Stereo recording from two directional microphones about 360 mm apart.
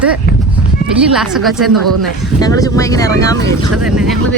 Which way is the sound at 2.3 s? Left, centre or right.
Centre.